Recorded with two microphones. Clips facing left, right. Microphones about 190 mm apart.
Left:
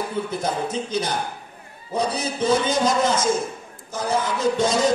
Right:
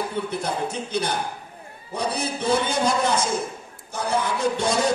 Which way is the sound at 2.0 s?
60° right (ahead or behind).